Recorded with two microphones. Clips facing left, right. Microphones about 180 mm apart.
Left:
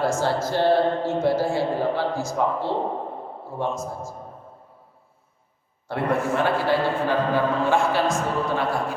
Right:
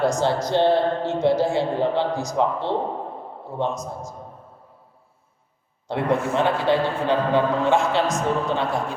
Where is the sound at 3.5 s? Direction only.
20° right (ahead or behind).